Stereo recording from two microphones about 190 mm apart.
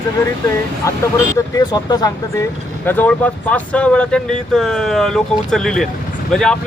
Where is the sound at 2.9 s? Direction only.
10° left (ahead or behind).